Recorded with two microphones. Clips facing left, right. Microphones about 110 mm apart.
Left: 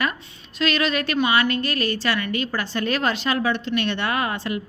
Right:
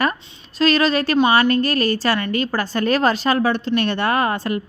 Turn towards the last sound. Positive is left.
turn(degrees=-45)  # may be behind; listen again after turning